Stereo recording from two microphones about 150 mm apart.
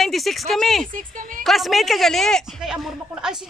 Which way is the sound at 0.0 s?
Centre (ahead or behind).